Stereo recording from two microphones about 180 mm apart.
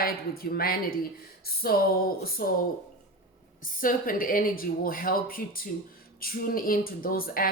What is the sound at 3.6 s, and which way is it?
Speech, 50° left (ahead or behind).